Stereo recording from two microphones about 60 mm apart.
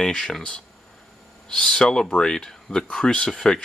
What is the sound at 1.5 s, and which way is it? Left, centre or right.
Speech, centre.